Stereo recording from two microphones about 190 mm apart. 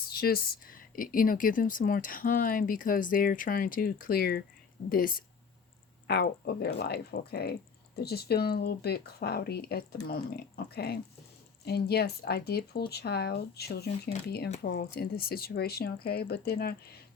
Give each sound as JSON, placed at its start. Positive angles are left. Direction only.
{"t": 0.1, "sound": "a woman's voice", "side_deg": 50}